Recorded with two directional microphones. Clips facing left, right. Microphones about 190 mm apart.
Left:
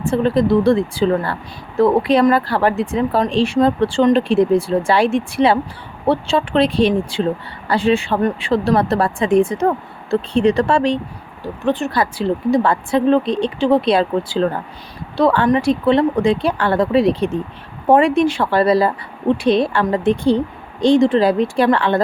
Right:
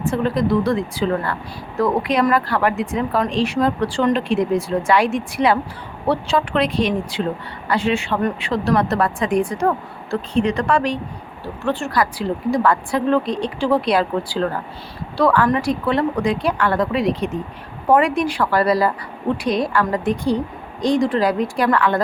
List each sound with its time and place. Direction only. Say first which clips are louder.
0.0 s speech: left 4 dB; 30° left (ahead or behind)